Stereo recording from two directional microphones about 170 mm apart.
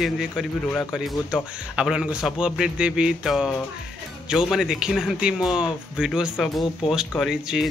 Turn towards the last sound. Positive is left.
turn(degrees=-5)  # may be behind; listen again after turning